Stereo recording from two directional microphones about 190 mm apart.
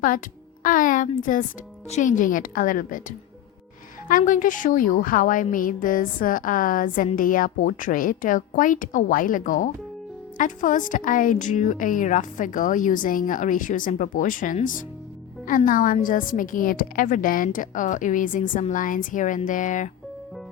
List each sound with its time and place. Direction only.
0.6 s a woman's voice: 45° left (ahead or behind)